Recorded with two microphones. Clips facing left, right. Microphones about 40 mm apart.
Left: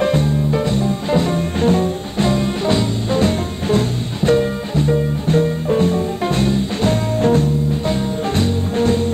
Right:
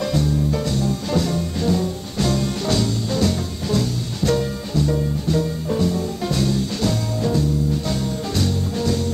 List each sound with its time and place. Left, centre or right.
0.0 s music: left